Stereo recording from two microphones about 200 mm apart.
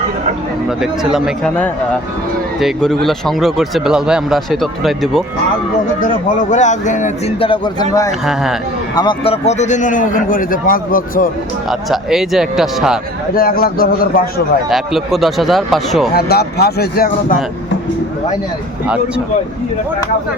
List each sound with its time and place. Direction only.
0.8 s speech: 5° right (ahead or behind)
2.6 s speech: centre (ahead or behind)
6.5 s a man's voice: 35° left (ahead or behind)
11.7 s speech: centre (ahead or behind)
13.3 s speech: 50° left (ahead or behind)
14.7 s speech: centre (ahead or behind)
16.1 s speech: 55° left (ahead or behind)